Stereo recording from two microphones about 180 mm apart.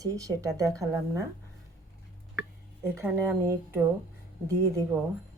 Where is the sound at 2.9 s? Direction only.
15° right (ahead or behind).